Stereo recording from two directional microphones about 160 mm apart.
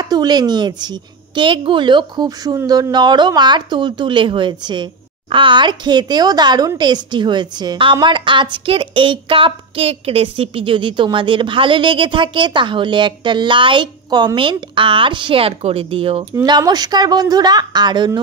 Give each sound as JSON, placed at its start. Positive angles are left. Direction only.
{"t": 0.0, "sound": "a woman's voice", "side_deg": -25}
{"t": 16.4, "sound": "a woman's voice", "side_deg": -25}